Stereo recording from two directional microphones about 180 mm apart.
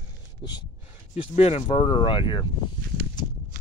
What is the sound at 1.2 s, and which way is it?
Speech, 35° left (ahead or behind).